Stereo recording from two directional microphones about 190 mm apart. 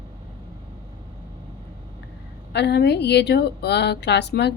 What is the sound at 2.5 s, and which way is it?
Speech, 60° left (ahead or behind).